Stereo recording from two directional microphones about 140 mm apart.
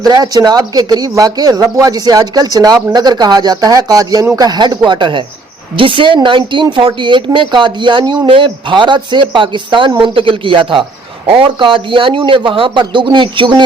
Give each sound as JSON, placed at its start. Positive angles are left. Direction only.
{"t": 0.0, "sound": "speech", "side_deg": -30}